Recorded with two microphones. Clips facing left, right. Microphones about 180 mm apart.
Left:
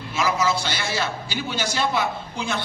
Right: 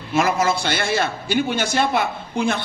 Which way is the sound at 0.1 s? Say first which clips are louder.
Right 4 dB; 55° right (ahead or behind).